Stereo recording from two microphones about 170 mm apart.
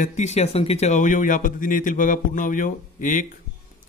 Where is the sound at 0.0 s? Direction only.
45° left (ahead or behind).